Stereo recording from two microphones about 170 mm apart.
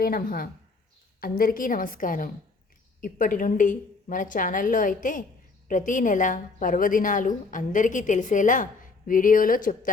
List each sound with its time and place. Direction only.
0.0 s a woman's voice: 60° left (ahead or behind)